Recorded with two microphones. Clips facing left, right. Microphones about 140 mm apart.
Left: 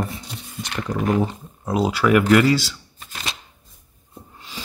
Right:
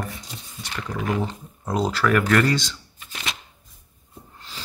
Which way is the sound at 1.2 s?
5° left (ahead or behind).